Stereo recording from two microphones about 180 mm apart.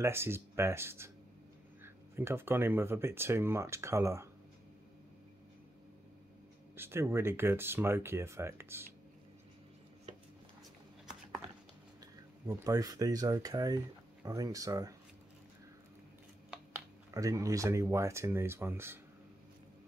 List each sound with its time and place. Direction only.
0.0 s speech: 15° right (ahead or behind)
6.8 s speech: 15° right (ahead or behind)
12.0 s speech: 20° right (ahead or behind)
16.4 s speech: 15° right (ahead or behind)